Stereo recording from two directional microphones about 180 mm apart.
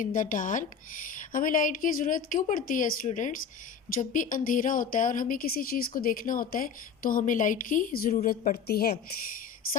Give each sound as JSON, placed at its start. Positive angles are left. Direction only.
{"t": 0.0, "sound": "a woman's voice", "side_deg": 50}